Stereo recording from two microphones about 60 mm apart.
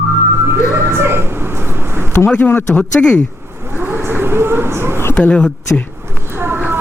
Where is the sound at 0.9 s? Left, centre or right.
Right.